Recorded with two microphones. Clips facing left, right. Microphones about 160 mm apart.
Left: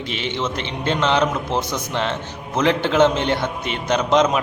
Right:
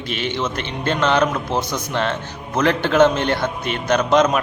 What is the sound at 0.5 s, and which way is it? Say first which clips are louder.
A man's voice: even; 20° left (ahead or behind).